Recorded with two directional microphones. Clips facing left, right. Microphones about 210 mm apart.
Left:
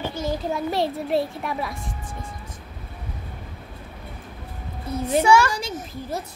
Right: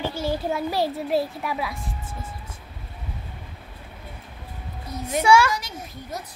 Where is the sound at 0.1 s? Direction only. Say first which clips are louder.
Even; 10° right (ahead or behind).